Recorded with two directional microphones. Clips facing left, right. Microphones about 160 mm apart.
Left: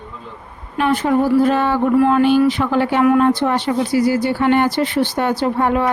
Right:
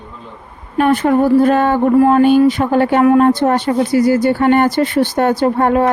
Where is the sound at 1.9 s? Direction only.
35° right (ahead or behind).